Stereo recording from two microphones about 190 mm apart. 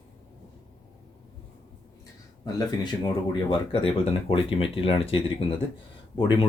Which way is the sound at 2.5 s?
25° left (ahead or behind).